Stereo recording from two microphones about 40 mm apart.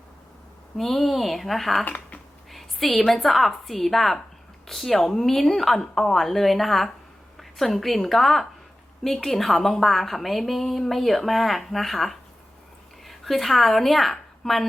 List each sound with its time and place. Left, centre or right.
0.8 s a woman's voice: centre
1.8 s speech: left
2.5 s a woman's voice: centre